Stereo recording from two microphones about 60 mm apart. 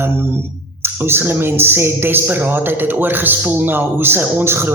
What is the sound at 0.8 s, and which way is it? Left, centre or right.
A man's voice, right.